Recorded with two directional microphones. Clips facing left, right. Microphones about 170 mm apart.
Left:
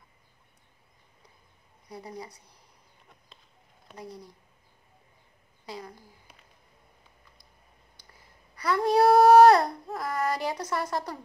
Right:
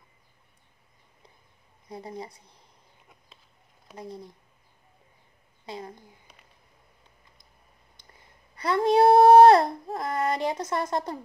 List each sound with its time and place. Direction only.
1.9 s speech: 25° right (ahead or behind)
3.3 s a sound: centre (ahead or behind)
4.0 s speech: 25° right (ahead or behind)
5.7 s speech: 25° right (ahead or behind)
8.5 s speech: 25° right (ahead or behind)